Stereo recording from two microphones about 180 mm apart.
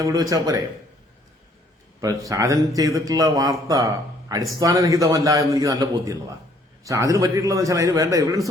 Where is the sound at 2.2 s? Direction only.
20° right (ahead or behind).